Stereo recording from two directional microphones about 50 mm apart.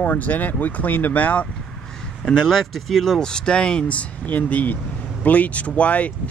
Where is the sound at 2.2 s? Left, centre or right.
Centre; by 6.3 s left.